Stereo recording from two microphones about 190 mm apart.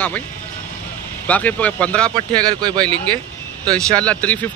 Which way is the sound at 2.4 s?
20° right (ahead or behind).